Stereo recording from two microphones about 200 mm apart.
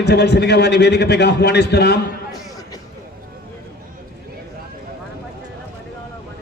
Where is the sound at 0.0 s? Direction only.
55° left (ahead or behind).